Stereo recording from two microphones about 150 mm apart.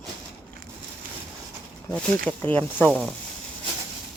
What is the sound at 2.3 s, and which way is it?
Speech, 10° left (ahead or behind).